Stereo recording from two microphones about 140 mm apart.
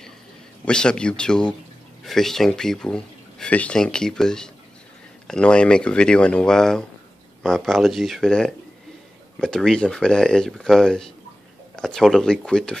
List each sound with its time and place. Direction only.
0.7 s speech: 5° left (ahead or behind)